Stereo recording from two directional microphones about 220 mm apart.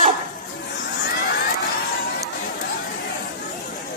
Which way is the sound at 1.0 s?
40° left (ahead or behind).